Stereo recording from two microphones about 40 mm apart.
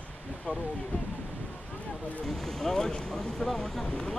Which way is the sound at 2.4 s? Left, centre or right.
Centre.